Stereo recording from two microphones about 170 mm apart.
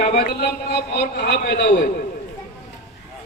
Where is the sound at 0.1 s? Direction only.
70° left (ahead or behind).